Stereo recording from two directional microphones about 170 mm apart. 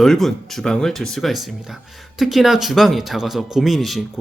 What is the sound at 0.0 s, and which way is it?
Speech, centre (ahead or behind).